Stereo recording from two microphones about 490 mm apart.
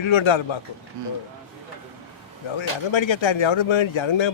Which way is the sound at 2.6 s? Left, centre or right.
Left.